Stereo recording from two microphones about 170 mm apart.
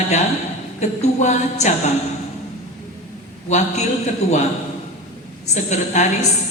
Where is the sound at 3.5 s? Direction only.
45° left (ahead or behind).